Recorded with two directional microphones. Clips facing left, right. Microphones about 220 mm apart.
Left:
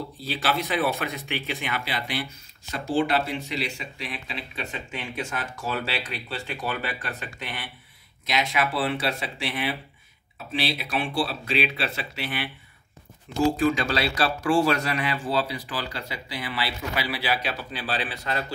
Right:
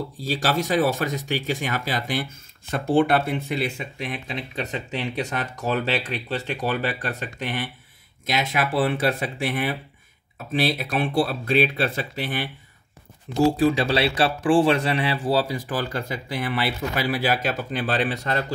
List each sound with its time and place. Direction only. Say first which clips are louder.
0.2 s speech: right 3 dB; 45° right (ahead or behind)
13.6 s speech: right 4 dB; 30° right (ahead or behind)